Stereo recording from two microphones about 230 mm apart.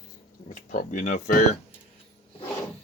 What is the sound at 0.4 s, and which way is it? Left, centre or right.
Speech, left.